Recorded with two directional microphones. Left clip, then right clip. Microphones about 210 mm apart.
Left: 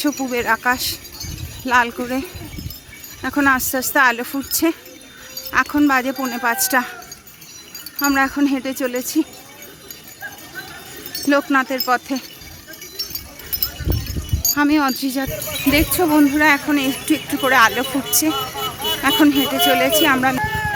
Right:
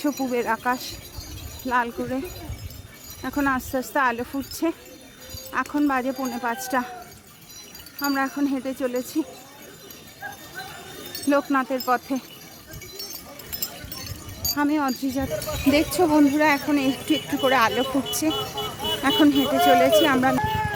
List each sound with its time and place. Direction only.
0.1 s speech: 5° left (ahead or behind)
8.0 s speech: 20° left (ahead or behind)
11.3 s speech: 5° left (ahead or behind)
14.5 s speech: 10° left (ahead or behind)
15.7 s speech: 5° right (ahead or behind)
18.3 s music: 25° left (ahead or behind)
19.0 s speech: 5° right (ahead or behind)
20.4 s a sound: 10° left (ahead or behind)